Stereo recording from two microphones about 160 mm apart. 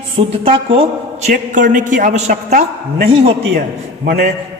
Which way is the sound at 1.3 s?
55° right (ahead or behind).